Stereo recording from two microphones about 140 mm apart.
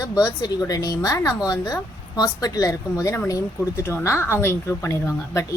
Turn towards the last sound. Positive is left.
turn(degrees=20)  # may be behind; listen again after turning